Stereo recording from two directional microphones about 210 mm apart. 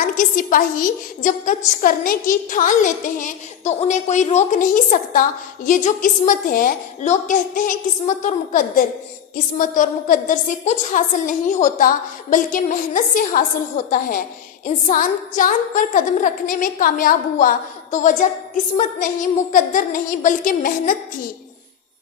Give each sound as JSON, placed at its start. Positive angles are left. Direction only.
{"t": 0.0, "sound": "music", "side_deg": 40}